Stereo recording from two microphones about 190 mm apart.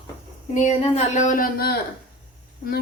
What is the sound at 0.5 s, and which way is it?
A woman's voice, 35° left (ahead or behind).